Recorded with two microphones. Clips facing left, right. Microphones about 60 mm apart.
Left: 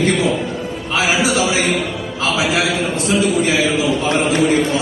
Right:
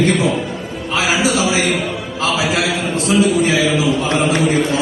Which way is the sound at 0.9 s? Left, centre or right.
Left.